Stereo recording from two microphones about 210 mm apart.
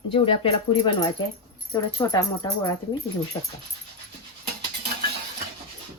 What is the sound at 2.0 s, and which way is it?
Speech, 15° left (ahead or behind).